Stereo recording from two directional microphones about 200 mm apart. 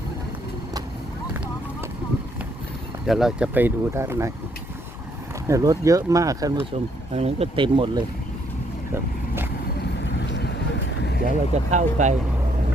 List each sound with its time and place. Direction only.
3.1 s speech: centre (ahead or behind)
5.5 s speech: 15° right (ahead or behind)
7.2 s speech: 30° right (ahead or behind)
10.0 s vehicle: 60° left (ahead or behind)
11.7 s speech: 35° right (ahead or behind)